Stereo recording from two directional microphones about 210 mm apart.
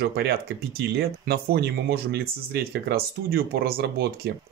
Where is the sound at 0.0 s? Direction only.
50° right (ahead or behind).